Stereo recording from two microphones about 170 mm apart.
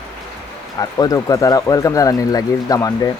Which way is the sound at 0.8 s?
20° left (ahead or behind).